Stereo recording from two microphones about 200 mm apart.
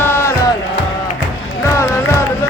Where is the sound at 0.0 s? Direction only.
10° left (ahead or behind).